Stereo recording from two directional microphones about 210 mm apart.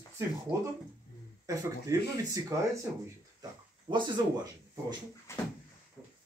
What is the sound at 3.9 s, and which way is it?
Speech, 20° right (ahead or behind).